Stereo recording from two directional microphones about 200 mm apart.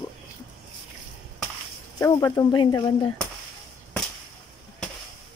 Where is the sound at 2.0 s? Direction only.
15° left (ahead or behind).